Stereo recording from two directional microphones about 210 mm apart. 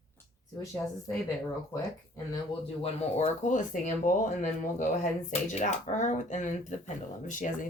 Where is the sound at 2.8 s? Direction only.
35° left (ahead or behind).